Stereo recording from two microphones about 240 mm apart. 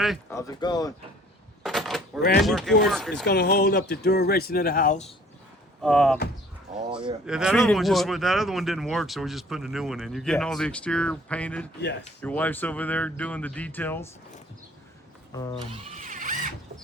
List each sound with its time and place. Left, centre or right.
0.0 s speech: centre
0.3 s speech: centre
1.6 s a sound: centre
2.4 s speech: centre
3.2 s speech: left
5.8 s speech: centre
7.3 s speech: centre
15.3 s speech: centre
15.6 s a sound: right